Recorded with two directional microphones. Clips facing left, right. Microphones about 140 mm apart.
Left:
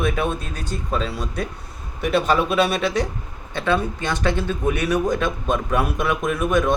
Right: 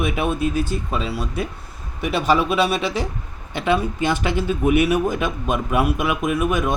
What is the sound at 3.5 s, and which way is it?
Speech, 15° right (ahead or behind).